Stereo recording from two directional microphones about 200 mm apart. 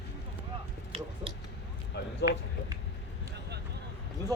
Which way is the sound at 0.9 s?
25° right (ahead or behind).